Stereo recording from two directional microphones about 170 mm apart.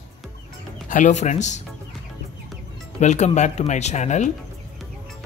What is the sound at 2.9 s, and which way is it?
Speech, 45° left (ahead or behind).